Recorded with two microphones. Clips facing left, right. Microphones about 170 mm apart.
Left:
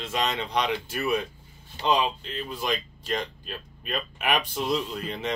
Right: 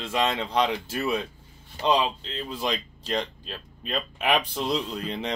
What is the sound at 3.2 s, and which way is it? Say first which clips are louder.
Speech: right 2 dB; 25° right (ahead or behind).